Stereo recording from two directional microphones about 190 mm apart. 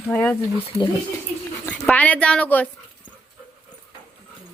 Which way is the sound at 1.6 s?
5° left (ahead or behind).